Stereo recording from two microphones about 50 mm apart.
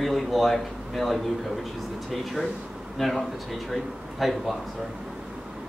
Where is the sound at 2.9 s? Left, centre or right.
Centre.